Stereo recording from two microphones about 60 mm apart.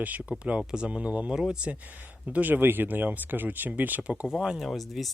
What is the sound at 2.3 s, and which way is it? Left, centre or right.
Speech, right.